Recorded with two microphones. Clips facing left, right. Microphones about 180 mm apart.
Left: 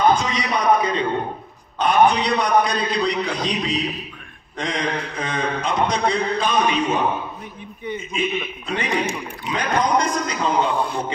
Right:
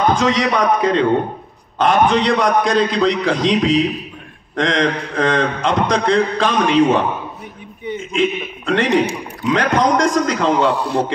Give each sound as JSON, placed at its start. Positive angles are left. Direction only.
{"t": 0.1, "sound": "a man's voice", "side_deg": -90}
{"t": 8.1, "sound": "a man's voice", "side_deg": -90}